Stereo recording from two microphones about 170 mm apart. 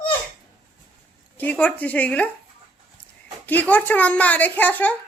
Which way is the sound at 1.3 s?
10° left (ahead or behind).